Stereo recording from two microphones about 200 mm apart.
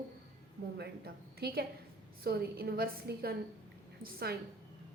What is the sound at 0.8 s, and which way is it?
A woman's voice, 50° right (ahead or behind).